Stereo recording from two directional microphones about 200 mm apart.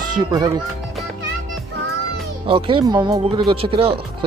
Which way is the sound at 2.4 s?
25° right (ahead or behind).